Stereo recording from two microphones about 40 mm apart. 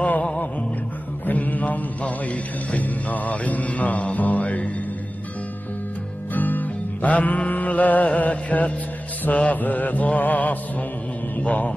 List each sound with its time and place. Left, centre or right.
0.0 s music: left
1.2 s mantra: left
6.3 s music: left
9.3 s mantra: left